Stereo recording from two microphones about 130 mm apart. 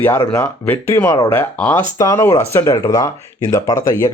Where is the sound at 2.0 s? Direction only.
25° left (ahead or behind).